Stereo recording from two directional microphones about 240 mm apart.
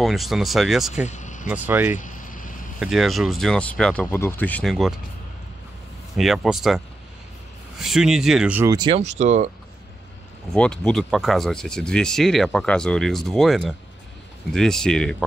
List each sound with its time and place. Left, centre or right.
0.0 s speech: centre
1.0 s vehicle: left
1.5 s speech: centre
2.0 s a sound: left
2.8 s speech: centre
6.1 s speech: centre
7.8 s speech: centre; by 9.5 s right
10.5 s speech: centre